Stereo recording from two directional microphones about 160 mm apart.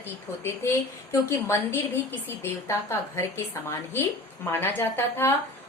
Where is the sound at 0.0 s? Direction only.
15° left (ahead or behind).